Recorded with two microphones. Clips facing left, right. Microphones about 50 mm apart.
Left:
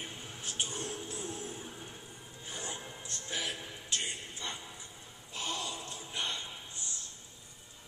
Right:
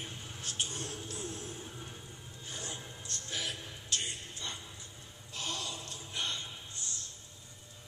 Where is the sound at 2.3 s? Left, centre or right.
Centre.